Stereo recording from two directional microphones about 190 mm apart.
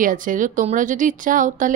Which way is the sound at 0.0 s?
45° right (ahead or behind).